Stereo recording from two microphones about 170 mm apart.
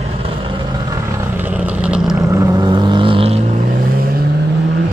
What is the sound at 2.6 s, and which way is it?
Vehicle, 30° right (ahead or behind).